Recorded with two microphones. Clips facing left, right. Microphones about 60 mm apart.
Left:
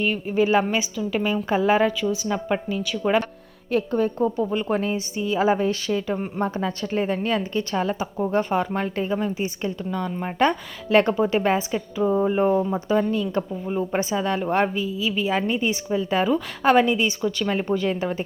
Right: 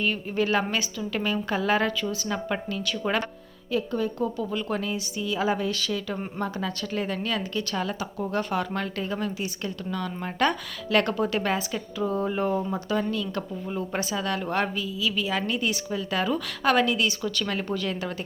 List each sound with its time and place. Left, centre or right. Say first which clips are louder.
0.0 s a woman's voice: left 4 dB; centre
3.7 s a woman's voice: left 5 dB; left